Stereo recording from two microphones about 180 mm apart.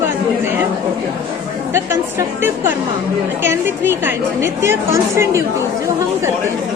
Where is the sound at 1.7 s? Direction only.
15° right (ahead or behind).